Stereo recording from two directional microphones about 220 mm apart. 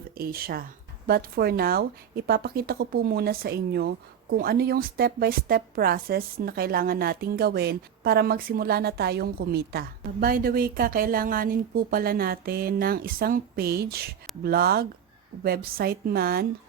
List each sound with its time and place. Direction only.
0.2 s speech: 40° right (ahead or behind)